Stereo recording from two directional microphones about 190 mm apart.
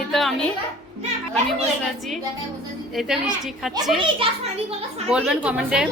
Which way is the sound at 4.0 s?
30° right (ahead or behind).